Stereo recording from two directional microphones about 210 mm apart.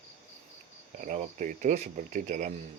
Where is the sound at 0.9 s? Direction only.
35° right (ahead or behind).